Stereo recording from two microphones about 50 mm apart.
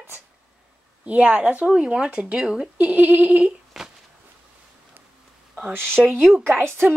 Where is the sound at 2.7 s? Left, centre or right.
Right.